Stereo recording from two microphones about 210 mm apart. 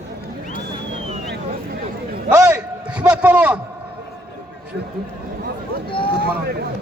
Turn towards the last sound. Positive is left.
turn(degrees=25)  # may be behind; listen again after turning